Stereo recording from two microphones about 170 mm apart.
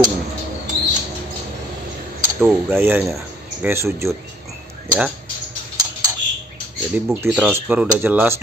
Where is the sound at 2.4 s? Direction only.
10° right (ahead or behind).